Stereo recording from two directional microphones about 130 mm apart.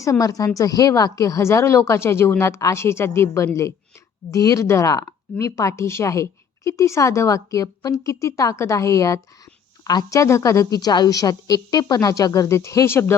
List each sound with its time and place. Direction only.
0.0 s a woman's voice: 25° left (ahead or behind)